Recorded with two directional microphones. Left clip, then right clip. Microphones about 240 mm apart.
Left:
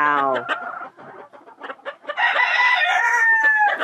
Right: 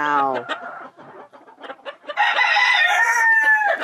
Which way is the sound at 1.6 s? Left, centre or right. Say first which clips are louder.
Left 2 dB; left.